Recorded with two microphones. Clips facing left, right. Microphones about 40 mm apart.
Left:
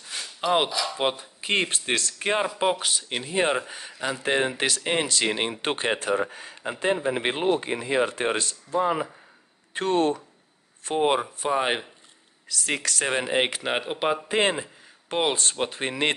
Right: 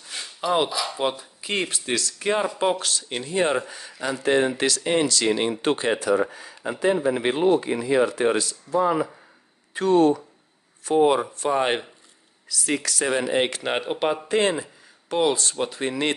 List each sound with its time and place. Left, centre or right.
0.7 s speech: centre
0.9 s speech: left
2.4 s speech: centre; by 5.9 s left
6.3 s speech: left
8.7 s speech: left
9.8 s speech: left
11.3 s speech: centre
11.6 s speech: centre
12.4 s speech: left
13.1 s speech: left
13.7 s speech: centre
14.3 s speech: left